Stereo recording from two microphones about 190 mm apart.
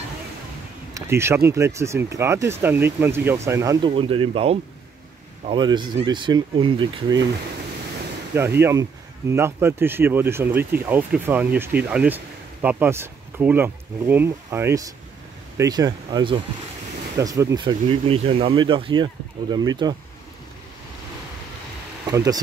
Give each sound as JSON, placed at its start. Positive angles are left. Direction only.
{"t": 0.9, "sound": "speech", "side_deg": -15}
{"t": 3.9, "sound": "speech", "side_deg": -30}
{"t": 8.4, "sound": "speech", "side_deg": -15}
{"t": 17.8, "sound": "speech", "side_deg": -30}
{"t": 22.1, "sound": "speech", "side_deg": -20}